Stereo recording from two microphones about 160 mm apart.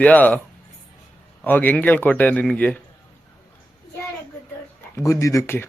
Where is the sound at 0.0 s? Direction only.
10° left (ahead or behind).